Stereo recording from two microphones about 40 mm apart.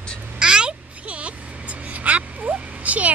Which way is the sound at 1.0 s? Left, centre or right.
Right.